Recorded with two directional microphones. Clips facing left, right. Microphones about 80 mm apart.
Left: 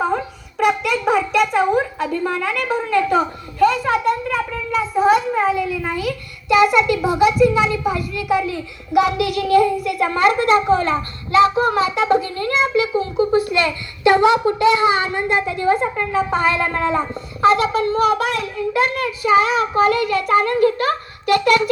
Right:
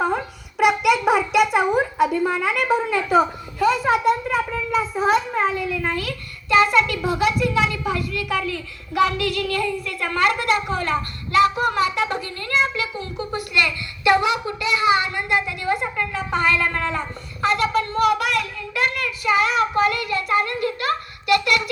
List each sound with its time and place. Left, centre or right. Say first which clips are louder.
0.0 s a sound: left 2 dB; centre
4.7 s a child's voice: left 4 dB; centre; by 19.0 s left
19.0 s a child's voice: left 5 dB; left
19.9 s a child's voice: left 6 dB; left